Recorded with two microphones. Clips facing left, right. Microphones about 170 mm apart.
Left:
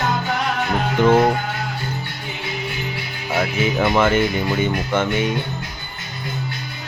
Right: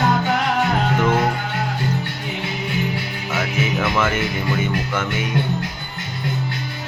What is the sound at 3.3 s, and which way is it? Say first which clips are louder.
Music: left 3 dB; 30° left (ahead or behind).